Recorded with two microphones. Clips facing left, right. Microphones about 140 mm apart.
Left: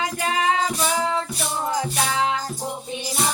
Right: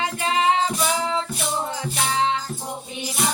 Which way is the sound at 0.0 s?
30° right (ahead or behind).